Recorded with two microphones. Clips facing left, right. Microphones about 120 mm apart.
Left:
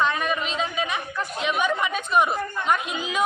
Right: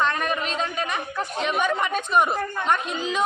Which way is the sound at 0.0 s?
Centre (ahead or behind).